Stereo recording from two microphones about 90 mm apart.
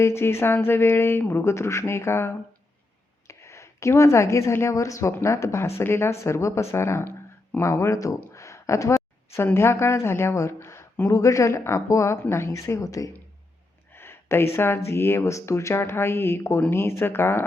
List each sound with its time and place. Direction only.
0.0 s a woman's voice: 30° left (ahead or behind)
8.3 s a sound: 35° left (ahead or behind)
9.3 s a woman's voice: 30° left (ahead or behind)
13.9 s speech: 25° left (ahead or behind)